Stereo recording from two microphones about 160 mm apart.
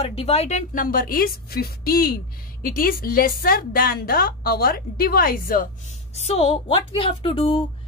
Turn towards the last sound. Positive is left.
turn(degrees=35)  # may be behind; listen again after turning